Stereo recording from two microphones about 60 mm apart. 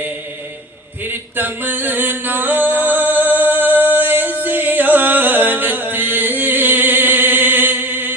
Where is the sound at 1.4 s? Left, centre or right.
Right.